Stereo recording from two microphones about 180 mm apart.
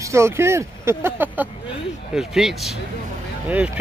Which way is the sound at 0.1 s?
15° right (ahead or behind).